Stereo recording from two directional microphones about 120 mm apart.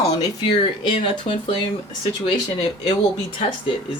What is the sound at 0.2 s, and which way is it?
Speech, 40° left (ahead or behind).